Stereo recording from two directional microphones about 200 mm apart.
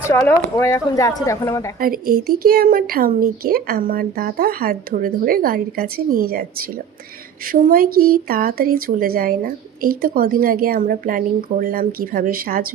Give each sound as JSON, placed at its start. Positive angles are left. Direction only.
{"t": 0.0, "sound": "speech", "side_deg": 15}
{"t": 1.8, "sound": "speech", "side_deg": -45}